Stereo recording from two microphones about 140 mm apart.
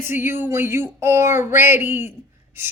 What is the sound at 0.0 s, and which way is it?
Speech, 15° right (ahead or behind).